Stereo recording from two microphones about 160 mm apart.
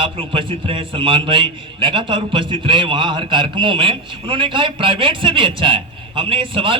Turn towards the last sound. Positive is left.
turn(degrees=-35)  # may be behind; listen again after turning